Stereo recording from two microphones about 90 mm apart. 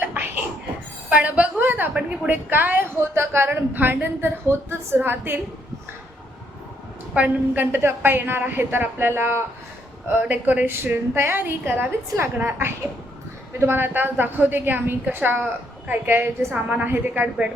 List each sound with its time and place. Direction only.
0.0 s a sound: 20° right (ahead or behind)
1.9 s a woman's voice: 15° right (ahead or behind)
7.5 s a woman's voice: 20° right (ahead or behind)